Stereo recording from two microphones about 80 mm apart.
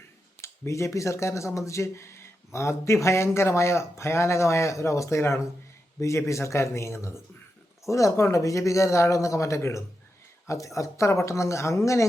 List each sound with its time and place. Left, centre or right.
0.4 s speech: left